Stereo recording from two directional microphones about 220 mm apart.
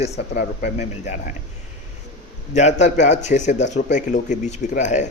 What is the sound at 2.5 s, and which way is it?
A man's voice, 30° left (ahead or behind).